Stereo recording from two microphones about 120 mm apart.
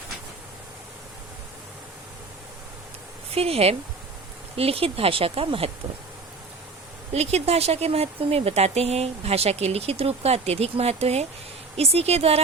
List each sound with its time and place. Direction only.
3.3 s speech: 55° right (ahead or behind)
7.1 s speech: 60° right (ahead or behind)